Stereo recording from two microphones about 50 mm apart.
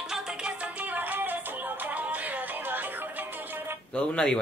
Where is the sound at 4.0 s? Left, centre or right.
Centre.